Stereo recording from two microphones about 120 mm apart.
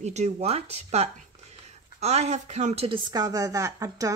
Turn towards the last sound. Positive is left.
turn(degrees=-30)  # may be behind; listen again after turning